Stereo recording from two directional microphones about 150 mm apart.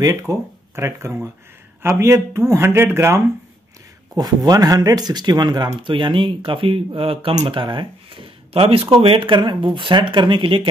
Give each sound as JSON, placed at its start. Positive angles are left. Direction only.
{"t": 0.0, "sound": "speech", "side_deg": -20}